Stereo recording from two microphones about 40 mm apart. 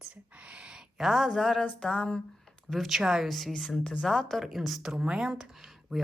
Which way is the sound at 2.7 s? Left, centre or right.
Centre.